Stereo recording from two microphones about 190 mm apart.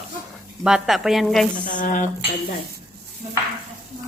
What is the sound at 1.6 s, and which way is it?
Speech, 45° left (ahead or behind).